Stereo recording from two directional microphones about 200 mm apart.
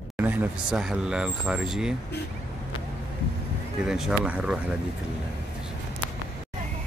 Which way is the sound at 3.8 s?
5° right (ahead or behind).